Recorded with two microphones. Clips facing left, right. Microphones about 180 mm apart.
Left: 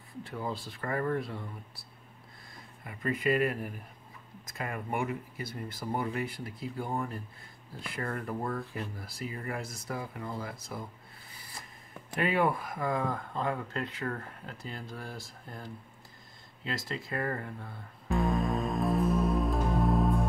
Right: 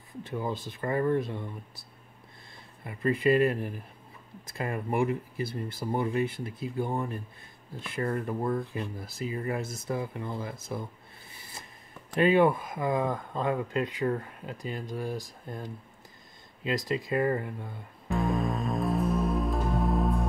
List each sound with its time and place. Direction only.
0.5 s speech: 20° right (ahead or behind)
2.8 s speech: 30° right (ahead or behind)
12.2 s speech: 25° right (ahead or behind)
18.1 s music: centre (ahead or behind)